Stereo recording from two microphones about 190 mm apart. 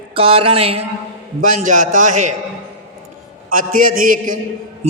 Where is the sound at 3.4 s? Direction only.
45° right (ahead or behind).